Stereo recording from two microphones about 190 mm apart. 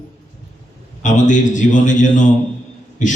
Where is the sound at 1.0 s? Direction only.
40° left (ahead or behind).